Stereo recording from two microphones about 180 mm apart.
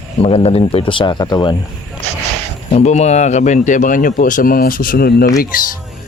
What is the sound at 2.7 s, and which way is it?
Speech, 40° left (ahead or behind).